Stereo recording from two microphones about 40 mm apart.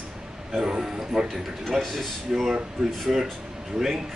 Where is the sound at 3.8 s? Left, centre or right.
Centre.